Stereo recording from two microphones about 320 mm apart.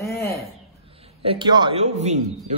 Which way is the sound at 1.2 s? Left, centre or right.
Centre.